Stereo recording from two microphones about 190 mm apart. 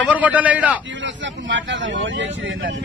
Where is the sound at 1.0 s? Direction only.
75° right (ahead or behind).